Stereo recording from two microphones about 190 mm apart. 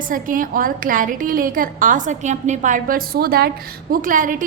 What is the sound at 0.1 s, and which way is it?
A woman's voice, 45° right (ahead or behind).